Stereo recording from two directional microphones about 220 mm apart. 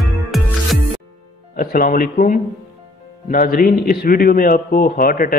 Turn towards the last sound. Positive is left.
turn(degrees=40)  # may be behind; listen again after turning